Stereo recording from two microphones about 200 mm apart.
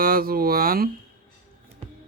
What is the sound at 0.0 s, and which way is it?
Speech, 45° right (ahead or behind).